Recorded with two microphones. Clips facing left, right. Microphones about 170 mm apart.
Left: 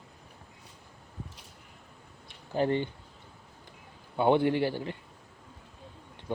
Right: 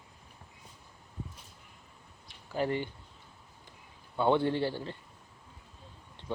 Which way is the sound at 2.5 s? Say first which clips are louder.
Left 4 dB; 25° left (ahead or behind).